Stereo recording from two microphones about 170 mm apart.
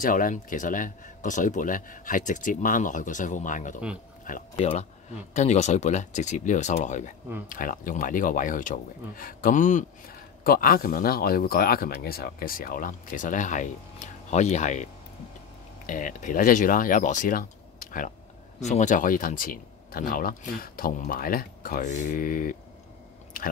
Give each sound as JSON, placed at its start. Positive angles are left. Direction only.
{"t": 0.0, "sound": "speech", "side_deg": 50}
{"t": 4.6, "sound": "speech", "side_deg": 35}
{"t": 15.9, "sound": "speech", "side_deg": 50}